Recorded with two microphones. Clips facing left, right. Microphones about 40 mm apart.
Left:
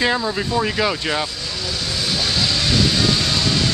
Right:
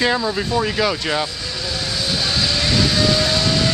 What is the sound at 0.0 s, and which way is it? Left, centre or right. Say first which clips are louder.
Speech: right 1 dB; centre.